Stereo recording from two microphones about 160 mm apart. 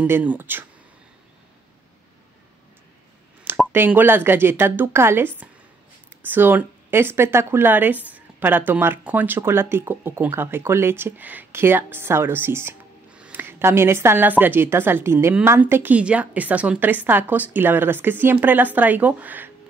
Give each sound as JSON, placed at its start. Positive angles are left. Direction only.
{"t": 0.0, "sound": "speech", "side_deg": -10}
{"t": 3.7, "sound": "speech", "side_deg": -15}